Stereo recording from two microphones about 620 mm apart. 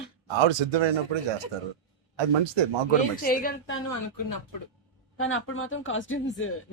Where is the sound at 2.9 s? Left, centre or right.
Centre.